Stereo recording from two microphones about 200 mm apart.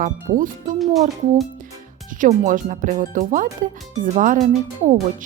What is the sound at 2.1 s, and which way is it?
Speech, 40° right (ahead or behind).